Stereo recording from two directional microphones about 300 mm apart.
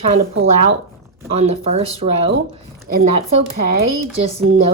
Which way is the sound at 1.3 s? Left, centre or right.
Right.